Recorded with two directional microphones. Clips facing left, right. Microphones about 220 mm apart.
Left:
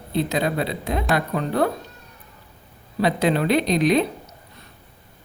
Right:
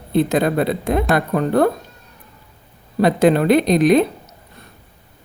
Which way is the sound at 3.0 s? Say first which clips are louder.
Right 6 dB; 50° right (ahead or behind).